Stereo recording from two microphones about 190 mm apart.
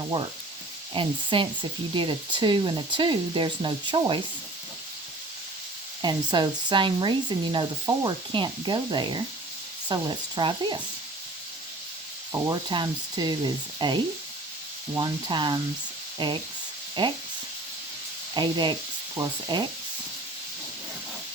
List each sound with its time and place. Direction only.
0.1 s frying: 30° right (ahead or behind)
0.9 s speech: 25° right (ahead or behind)
6.0 s speech: 25° right (ahead or behind)
12.3 s speech: 20° right (ahead or behind)
18.3 s speech: 25° right (ahead or behind)